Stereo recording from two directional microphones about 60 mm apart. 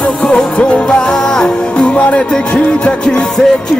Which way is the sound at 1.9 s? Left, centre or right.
Left.